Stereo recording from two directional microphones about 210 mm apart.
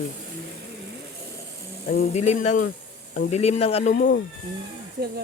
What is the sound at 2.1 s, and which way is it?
Speech, 30° left (ahead or behind).